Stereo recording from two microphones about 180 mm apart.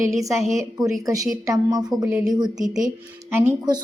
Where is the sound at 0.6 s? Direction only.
20° right (ahead or behind).